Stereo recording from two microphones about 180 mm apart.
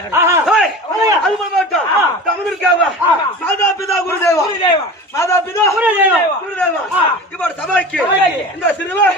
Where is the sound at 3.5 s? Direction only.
15° left (ahead or behind).